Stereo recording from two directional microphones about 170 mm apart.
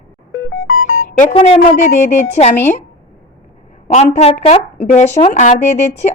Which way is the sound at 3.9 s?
40° left (ahead or behind).